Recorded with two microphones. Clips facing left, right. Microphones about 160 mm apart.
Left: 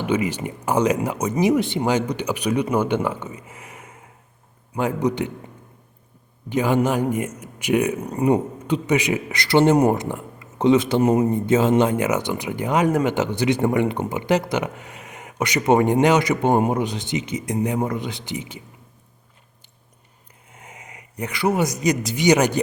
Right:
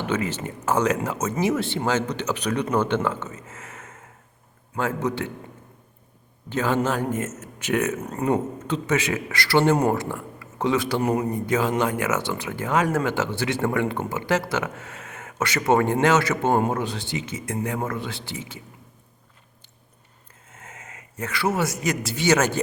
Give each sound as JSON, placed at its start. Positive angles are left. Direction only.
{"t": 0.0, "sound": "speech", "side_deg": 15}
{"t": 6.5, "sound": "speech", "side_deg": 15}
{"t": 20.5, "sound": "a man's voice", "side_deg": 15}